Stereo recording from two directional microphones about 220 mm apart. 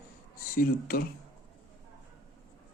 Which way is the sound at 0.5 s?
40° left (ahead or behind).